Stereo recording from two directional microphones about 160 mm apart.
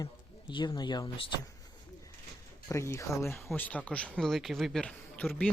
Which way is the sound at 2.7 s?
20° left (ahead or behind).